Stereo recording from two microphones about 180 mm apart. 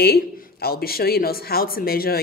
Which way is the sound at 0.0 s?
60° left (ahead or behind).